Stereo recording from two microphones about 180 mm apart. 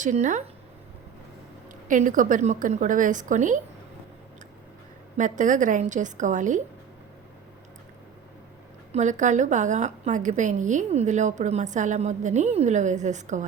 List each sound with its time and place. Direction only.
0.0 s a woman's voice: 45° right (ahead or behind)
1.9 s a woman's voice: 45° right (ahead or behind)
5.1 s a woman's voice: 45° right (ahead or behind)
8.9 s a woman's voice: 40° right (ahead or behind)